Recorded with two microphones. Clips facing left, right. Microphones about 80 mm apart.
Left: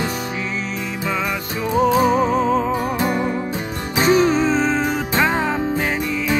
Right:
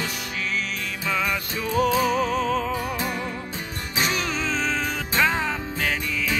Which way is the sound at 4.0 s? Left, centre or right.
Left.